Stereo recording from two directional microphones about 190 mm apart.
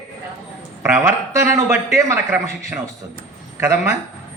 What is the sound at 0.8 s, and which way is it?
A man's voice, 15° right (ahead or behind).